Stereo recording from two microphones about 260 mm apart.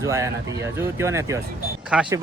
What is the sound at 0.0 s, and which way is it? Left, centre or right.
Speech, centre.